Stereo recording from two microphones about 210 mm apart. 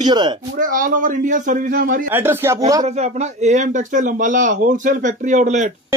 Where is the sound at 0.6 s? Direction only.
40° right (ahead or behind).